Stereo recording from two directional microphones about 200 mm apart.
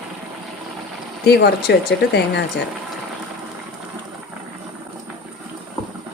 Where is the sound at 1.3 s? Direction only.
55° left (ahead or behind).